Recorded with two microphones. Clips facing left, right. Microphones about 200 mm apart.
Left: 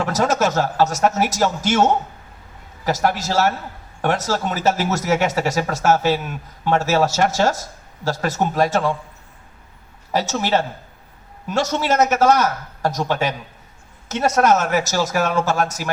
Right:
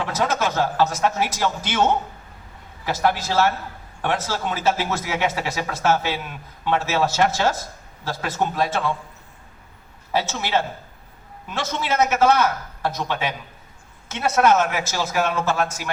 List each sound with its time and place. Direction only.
0.0 s speech: 45° left (ahead or behind)
10.1 s a man's voice: 40° left (ahead or behind)